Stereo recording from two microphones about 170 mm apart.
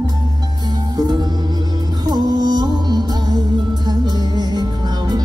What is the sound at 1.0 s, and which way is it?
Music, 25° right (ahead or behind).